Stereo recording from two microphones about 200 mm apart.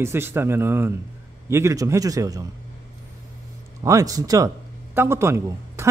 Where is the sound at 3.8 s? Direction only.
15° right (ahead or behind).